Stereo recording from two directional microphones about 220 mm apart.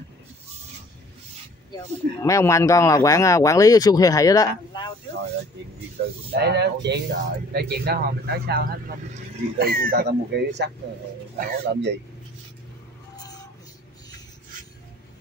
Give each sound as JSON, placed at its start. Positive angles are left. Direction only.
{"t": 2.2, "sound": "speech", "side_deg": 15}
{"t": 6.3, "sound": "speech", "side_deg": -50}
{"t": 13.1, "sound": "vehicle", "side_deg": 15}